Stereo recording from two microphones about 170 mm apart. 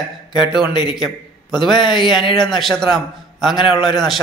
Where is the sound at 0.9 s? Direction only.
Centre (ahead or behind).